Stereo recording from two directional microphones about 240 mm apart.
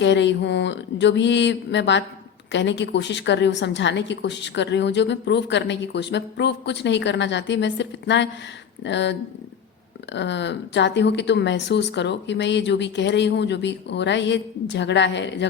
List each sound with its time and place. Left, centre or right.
0.0 s a woman's voice: left